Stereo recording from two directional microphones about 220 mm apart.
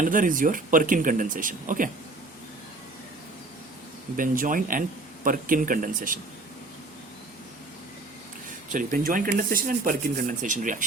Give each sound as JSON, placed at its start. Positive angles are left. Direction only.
{"t": 0.0, "sound": "speech", "side_deg": -35}
{"t": 4.2, "sound": "speech", "side_deg": -40}
{"t": 8.4, "sound": "speech", "side_deg": -35}